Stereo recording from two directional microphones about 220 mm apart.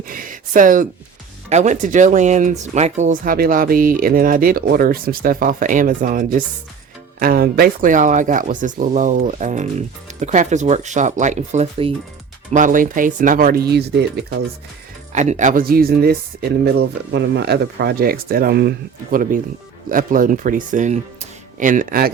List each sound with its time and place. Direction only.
0.1 s speech: 40° right (ahead or behind)
15.1 s speech: 30° right (ahead or behind)